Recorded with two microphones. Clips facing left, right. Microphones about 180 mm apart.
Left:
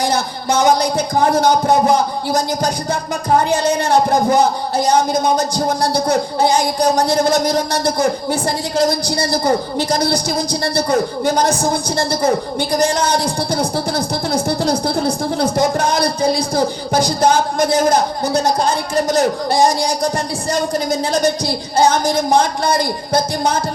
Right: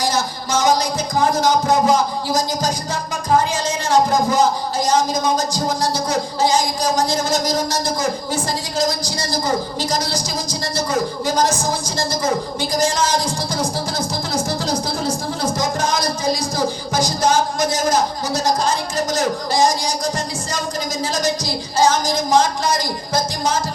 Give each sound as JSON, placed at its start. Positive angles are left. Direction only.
{"t": 0.0, "sound": "speech", "side_deg": 60}